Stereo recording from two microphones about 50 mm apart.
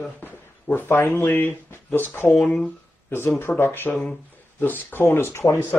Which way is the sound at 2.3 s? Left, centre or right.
Centre.